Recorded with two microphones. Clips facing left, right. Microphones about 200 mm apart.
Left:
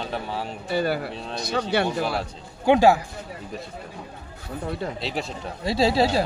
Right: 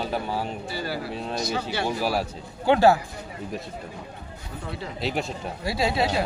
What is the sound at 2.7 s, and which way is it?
Speech, 15° left (ahead or behind).